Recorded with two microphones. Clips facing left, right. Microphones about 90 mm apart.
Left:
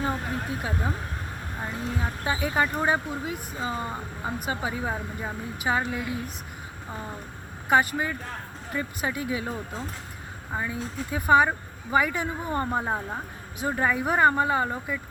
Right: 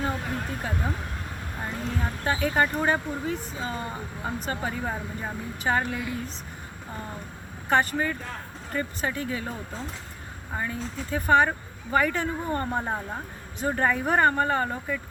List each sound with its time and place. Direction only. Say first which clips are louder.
0.0 s vehicle: left 1 dB; 30° left (ahead or behind)
0.4 s speech: left 1 dB; 10° left (ahead or behind)
7.7 s speech: left 1 dB; 10° left (ahead or behind)